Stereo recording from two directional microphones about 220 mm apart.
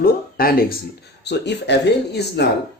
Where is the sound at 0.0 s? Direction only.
40° left (ahead or behind).